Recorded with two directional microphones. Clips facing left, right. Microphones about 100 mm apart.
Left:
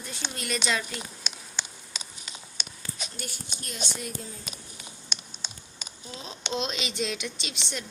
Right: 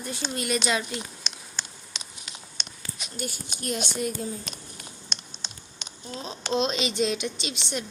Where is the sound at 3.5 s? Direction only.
55° right (ahead or behind).